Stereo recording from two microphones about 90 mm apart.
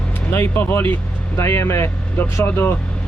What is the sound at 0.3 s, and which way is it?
Speech, 25° left (ahead or behind).